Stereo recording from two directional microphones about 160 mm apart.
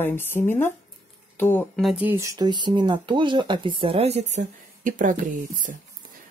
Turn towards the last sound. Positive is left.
turn(degrees=-55)  # may be behind; listen again after turning